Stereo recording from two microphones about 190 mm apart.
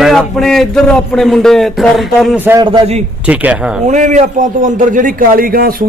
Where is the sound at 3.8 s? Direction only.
40° right (ahead or behind).